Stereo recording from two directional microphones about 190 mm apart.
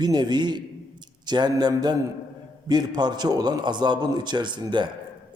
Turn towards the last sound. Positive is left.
turn(degrees=-25)  # may be behind; listen again after turning